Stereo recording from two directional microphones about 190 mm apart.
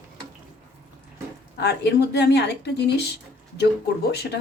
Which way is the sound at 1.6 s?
60° left (ahead or behind).